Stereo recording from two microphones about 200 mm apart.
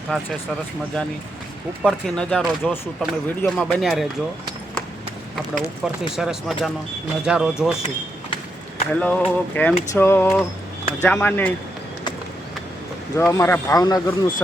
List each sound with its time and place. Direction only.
0.1 s speech: 5° left (ahead or behind)
5.5 s speech: centre (ahead or behind)
8.9 s speech: 5° left (ahead or behind)
13.1 s speech: 15° left (ahead or behind)